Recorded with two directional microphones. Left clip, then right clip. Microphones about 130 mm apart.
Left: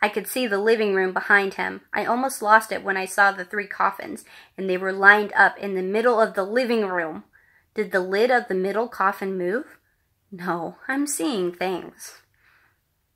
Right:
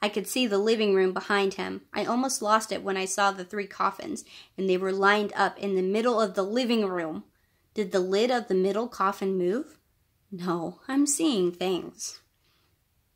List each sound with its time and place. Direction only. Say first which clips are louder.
0.0 s speech: left 4 dB; 45° right (ahead or behind)
10.3 s speech: left 4 dB; 45° right (ahead or behind)